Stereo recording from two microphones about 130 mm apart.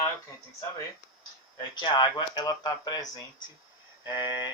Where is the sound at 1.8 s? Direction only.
35° left (ahead or behind).